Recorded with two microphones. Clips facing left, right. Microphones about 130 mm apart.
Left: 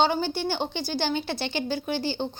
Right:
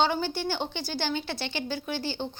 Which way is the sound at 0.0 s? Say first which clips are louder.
Left 2 dB; 20° left (ahead or behind).